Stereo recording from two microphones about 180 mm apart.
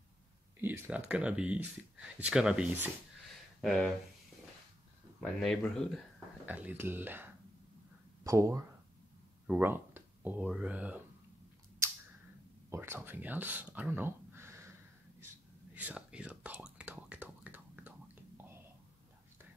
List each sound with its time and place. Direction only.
0.6 s speech: 10° right (ahead or behind)
5.2 s speech: 5° left (ahead or behind)
6.4 s speech: 10° right (ahead or behind)
12.6 s speech: 15° right (ahead or behind)
15.7 s whispering: 5° right (ahead or behind)